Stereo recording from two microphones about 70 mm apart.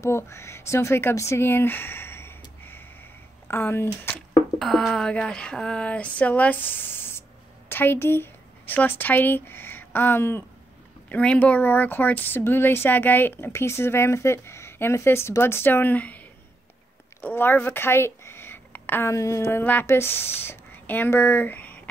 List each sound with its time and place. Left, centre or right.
0.0 s speech: left
4.6 s speech: centre
5.2 s speech: centre; by 10.4 s left
11.1 s speech: left
17.2 s a sound: left
19.1 s speech: left
19.6 s speech: left
19.9 s speech: left